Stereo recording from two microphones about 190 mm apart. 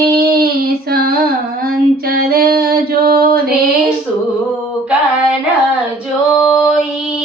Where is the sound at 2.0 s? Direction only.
50° right (ahead or behind).